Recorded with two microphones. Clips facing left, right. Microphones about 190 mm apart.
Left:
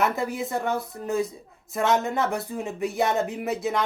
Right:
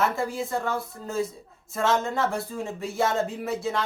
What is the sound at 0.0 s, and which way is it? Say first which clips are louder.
Speech: left 1 dB; 20° left (ahead or behind).